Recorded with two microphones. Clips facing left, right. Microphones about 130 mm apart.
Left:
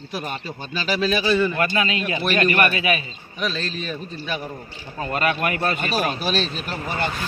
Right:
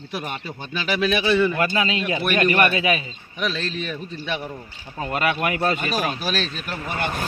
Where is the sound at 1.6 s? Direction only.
25° right (ahead or behind).